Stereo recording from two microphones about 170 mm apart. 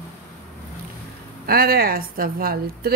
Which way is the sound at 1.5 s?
60° right (ahead or behind).